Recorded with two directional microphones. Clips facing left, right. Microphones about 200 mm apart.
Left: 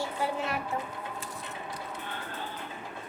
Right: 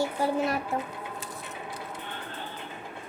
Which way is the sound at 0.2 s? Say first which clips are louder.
Right 3 dB; 40° right (ahead or behind).